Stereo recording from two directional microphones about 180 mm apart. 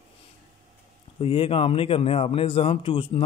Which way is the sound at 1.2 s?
30° left (ahead or behind).